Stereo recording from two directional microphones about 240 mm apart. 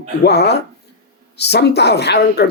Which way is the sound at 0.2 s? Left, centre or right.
Left.